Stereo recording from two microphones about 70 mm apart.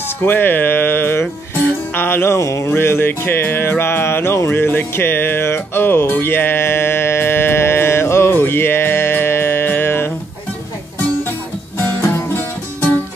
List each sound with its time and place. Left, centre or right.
0.2 s music: left
2.3 s music: left
12.0 s music: left